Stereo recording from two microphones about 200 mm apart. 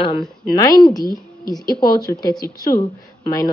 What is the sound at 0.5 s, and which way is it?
A woman's voice, 20° left (ahead or behind).